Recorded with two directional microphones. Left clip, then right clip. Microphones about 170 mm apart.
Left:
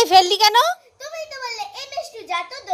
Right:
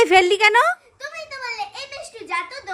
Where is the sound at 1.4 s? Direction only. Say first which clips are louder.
Right 3 dB; 90° right.